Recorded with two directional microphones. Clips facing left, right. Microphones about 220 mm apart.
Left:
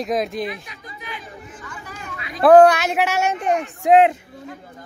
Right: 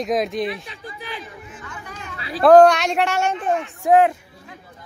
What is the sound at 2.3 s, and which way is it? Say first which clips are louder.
Speech: even; 5° left (ahead or behind).